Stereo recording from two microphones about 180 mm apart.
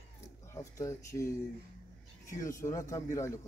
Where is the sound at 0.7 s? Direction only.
15° left (ahead or behind).